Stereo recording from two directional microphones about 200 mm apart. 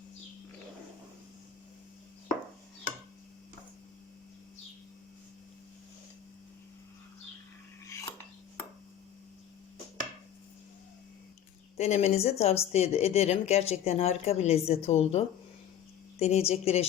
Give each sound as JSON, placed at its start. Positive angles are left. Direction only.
{"t": 11.8, "sound": "a woman's voice", "side_deg": 35}